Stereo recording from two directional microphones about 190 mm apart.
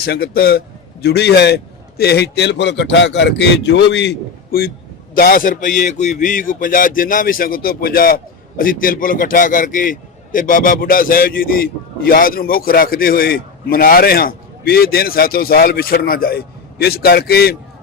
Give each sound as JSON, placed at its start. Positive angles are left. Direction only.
{"t": 0.0, "sound": "a man's voice", "side_deg": 55}